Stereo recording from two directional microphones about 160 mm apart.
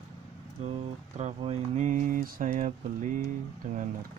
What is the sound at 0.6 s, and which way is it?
Speech, 40° right (ahead or behind).